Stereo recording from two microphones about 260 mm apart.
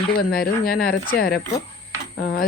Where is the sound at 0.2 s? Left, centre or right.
Left.